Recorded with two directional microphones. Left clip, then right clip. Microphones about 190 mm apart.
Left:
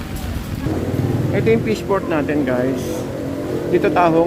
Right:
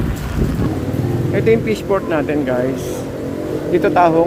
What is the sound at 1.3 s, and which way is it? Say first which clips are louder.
Speech: right 2 dB; 5° left (ahead or behind).